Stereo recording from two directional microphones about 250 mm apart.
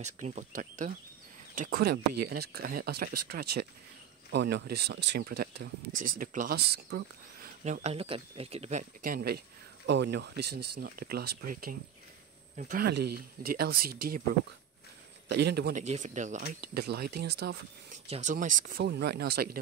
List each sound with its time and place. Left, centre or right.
0.0 s speech: right
4.3 s speech: right
7.6 s speech: right
15.2 s speech: right
15.8 s speech: right
16.6 s speech: right
17.9 s speech: right